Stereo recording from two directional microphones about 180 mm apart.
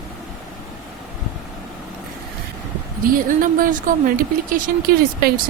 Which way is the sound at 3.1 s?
50° right (ahead or behind).